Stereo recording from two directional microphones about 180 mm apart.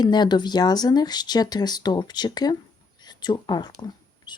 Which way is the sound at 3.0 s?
25° left (ahead or behind).